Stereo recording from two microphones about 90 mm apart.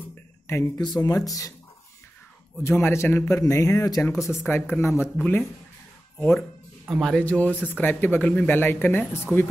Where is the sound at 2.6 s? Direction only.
30° left (ahead or behind).